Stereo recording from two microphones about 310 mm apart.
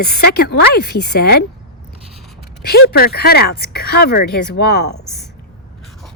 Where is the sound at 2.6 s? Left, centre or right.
Left.